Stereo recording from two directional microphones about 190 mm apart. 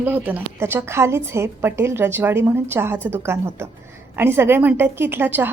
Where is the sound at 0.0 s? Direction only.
10° right (ahead or behind).